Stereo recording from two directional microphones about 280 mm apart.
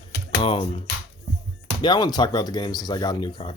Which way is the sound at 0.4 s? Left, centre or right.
Centre.